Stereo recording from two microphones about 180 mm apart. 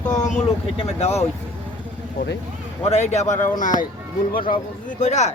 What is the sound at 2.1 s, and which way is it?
Speech, 70° left (ahead or behind).